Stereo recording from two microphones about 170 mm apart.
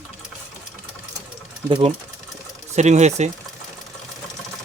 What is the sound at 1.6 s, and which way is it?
Speech, 30° right (ahead or behind).